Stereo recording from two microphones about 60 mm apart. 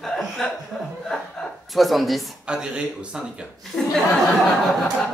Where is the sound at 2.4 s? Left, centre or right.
Centre.